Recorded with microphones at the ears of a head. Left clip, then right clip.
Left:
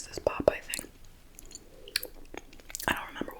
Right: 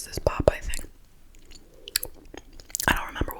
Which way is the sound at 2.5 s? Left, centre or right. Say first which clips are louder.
Right 7 dB; right.